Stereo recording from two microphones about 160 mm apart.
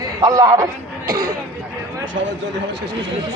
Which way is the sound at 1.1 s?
65° right (ahead or behind).